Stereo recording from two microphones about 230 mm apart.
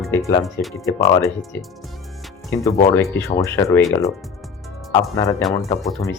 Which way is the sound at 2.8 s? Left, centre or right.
Centre.